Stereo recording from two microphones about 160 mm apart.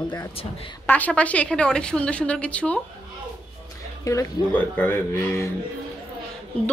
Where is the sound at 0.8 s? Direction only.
10° left (ahead or behind).